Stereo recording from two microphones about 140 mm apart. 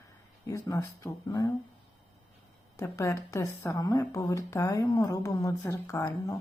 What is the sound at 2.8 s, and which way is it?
A woman's voice, 20° left (ahead or behind).